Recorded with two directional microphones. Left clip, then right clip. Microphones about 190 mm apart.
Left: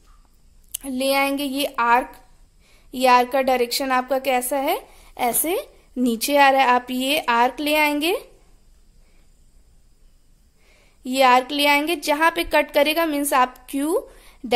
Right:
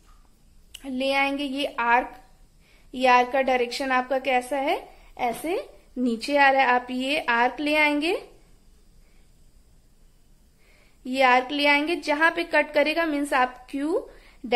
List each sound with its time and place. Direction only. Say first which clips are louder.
0.7 s a woman's voice: left 4 dB; 35° left (ahead or behind)
10.6 s speech: left 4 dB; 30° left (ahead or behind)